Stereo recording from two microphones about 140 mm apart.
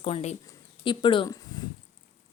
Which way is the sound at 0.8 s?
35° left (ahead or behind).